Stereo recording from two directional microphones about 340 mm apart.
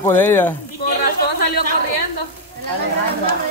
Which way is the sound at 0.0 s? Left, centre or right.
Centre.